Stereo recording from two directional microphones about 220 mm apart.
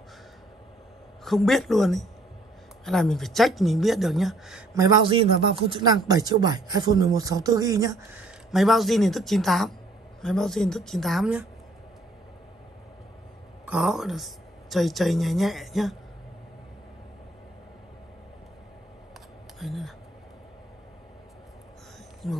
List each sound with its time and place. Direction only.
1.2 s speech: centre (ahead or behind)
4.7 s speech: 20° right (ahead or behind); by 11.4 s 5° right (ahead or behind)
13.7 s speech: 5° right (ahead or behind)
19.6 s speech: centre (ahead or behind)
22.2 s speech: centre (ahead or behind)